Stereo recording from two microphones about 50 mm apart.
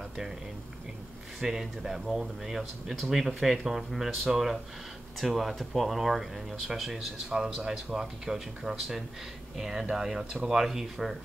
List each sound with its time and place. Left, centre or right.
1.4 s speech: centre
7.2 s speech: centre